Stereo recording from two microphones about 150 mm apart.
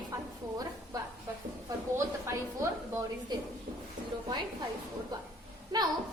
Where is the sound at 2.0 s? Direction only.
20° right (ahead or behind).